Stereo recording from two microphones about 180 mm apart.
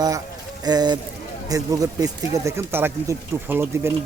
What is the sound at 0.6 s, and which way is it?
Speech, 20° right (ahead or behind).